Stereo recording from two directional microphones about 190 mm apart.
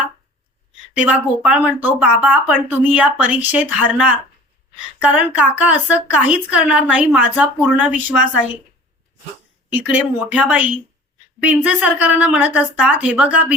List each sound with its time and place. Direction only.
0.9 s speech: 5° right (ahead or behind)
9.7 s speech: 10° right (ahead or behind)